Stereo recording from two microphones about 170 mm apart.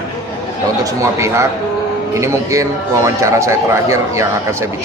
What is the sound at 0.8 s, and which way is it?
A man's voice, 15° right (ahead or behind).